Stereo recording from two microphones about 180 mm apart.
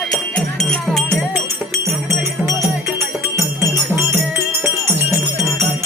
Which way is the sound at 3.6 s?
15° right (ahead or behind).